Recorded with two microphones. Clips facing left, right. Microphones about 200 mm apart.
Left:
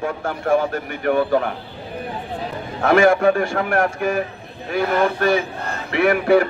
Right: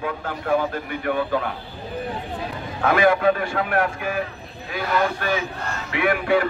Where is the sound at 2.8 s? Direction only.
45° left (ahead or behind).